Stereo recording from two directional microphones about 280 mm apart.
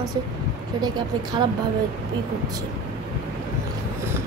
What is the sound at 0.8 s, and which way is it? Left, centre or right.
Speech, centre.